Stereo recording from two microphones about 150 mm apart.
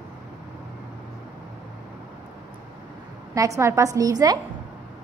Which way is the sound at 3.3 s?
20° right (ahead or behind).